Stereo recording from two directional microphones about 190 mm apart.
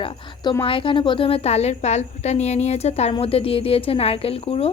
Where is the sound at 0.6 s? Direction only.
30° left (ahead or behind).